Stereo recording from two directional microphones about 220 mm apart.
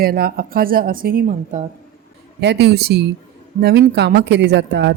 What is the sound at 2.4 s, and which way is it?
A woman's voice, 50° right (ahead or behind).